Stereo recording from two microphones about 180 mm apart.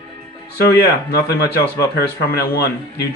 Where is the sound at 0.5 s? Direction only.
60° left (ahead or behind).